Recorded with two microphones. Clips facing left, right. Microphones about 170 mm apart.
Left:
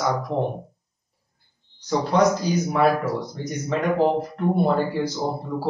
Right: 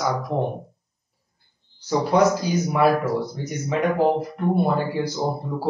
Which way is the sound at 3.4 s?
10° right (ahead or behind).